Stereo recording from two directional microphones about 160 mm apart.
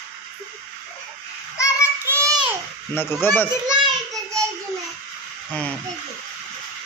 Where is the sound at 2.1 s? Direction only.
20° right (ahead or behind).